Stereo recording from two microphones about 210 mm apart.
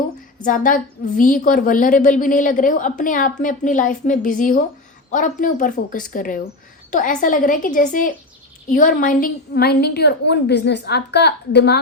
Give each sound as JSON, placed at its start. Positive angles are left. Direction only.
{"t": 0.4, "sound": "a woman's voice", "side_deg": 40}